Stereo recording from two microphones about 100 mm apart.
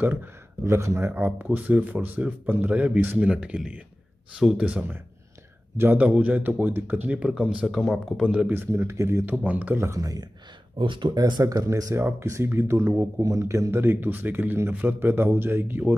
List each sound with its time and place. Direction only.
0.0 s speech: 20° right (ahead or behind)
8.5 s speech: 25° right (ahead or behind)
9.8 s speech: 35° right (ahead or behind)
10.8 s speech: 55° right (ahead or behind); by 15.9 s 20° right (ahead or behind)